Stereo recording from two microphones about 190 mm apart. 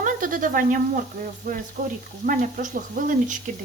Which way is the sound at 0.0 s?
45° right (ahead or behind).